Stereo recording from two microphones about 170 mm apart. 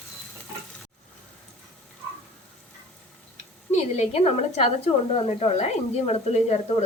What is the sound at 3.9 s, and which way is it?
Speech, 40° left (ahead or behind).